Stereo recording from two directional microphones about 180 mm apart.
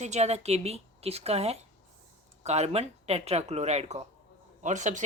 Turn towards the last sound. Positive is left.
turn(degrees=-40)  # may be behind; listen again after turning